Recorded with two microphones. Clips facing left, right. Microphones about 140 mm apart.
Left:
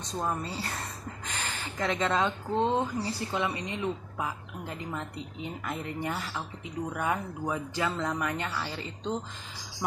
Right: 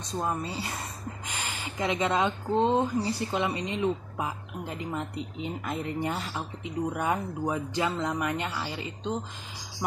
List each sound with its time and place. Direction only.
0.1 s speech: 10° right (ahead or behind)